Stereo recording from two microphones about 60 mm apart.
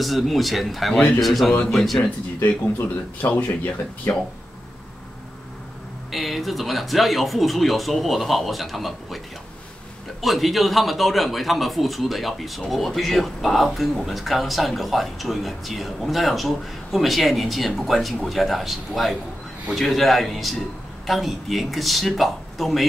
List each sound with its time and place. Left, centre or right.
0.0 s speech: centre
3.2 s speech: left
6.1 s speech: centre
10.2 s speech: centre